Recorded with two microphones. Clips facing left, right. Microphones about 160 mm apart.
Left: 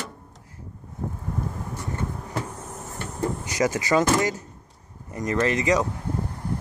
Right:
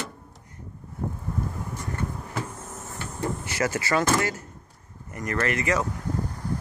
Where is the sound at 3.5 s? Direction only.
15° left (ahead or behind).